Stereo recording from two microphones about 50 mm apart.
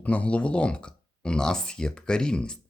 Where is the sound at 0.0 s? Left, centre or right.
Left.